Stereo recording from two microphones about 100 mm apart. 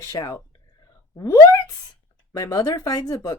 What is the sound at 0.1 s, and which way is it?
A woman's voice, 40° left (ahead or behind).